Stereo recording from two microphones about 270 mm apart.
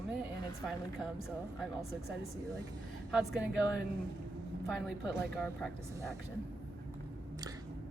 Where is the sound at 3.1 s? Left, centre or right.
Centre.